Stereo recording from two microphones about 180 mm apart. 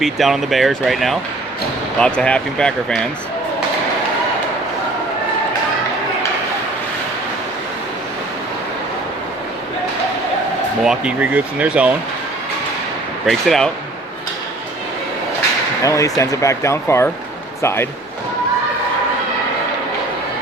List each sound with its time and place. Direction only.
0.0 s speech: centre (ahead or behind)
10.8 s speech: 5° right (ahead or behind)
13.2 s speech: centre (ahead or behind)
15.8 s speech: 15° left (ahead or behind)